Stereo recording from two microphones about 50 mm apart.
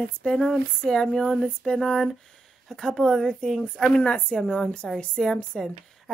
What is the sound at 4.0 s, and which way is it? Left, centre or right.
A woman's voice, left.